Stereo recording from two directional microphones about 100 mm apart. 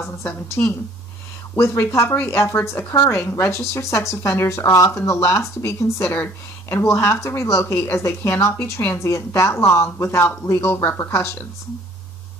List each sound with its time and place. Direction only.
0.2 s a woman's voice: 25° left (ahead or behind)